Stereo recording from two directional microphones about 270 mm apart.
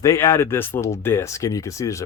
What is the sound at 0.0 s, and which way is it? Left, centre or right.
Speech, centre.